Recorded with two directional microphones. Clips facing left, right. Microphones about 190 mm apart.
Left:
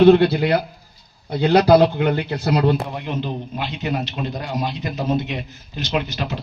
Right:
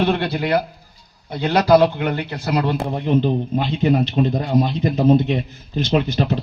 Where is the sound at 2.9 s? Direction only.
35° right (ahead or behind).